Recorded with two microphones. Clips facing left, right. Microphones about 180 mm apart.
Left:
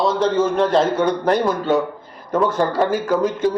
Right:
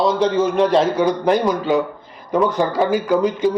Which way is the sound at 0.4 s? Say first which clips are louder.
Right 1 dB; 20° right (ahead or behind).